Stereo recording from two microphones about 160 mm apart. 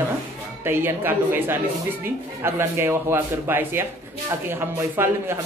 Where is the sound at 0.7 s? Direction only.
15° right (ahead or behind).